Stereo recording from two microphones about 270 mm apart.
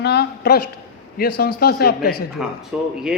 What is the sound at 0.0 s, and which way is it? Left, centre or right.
Speech, left.